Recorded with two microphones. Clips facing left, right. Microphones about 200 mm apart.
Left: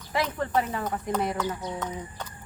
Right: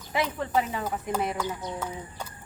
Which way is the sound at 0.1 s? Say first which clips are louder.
Even; 5° right (ahead or behind).